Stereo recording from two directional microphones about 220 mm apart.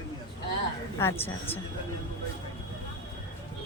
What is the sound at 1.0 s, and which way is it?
Speech, 10° left (ahead or behind).